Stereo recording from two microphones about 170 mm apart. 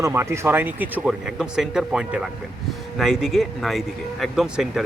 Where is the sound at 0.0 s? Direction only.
15° right (ahead or behind).